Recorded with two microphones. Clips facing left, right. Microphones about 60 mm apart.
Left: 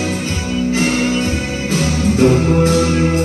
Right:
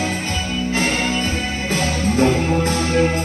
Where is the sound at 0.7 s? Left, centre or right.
Right.